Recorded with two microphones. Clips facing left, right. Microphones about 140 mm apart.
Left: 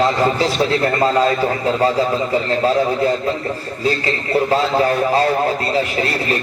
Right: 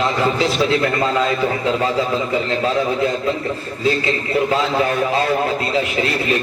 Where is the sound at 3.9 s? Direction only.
40° left (ahead or behind).